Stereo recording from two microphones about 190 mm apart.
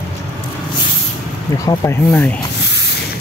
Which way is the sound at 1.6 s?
15° left (ahead or behind).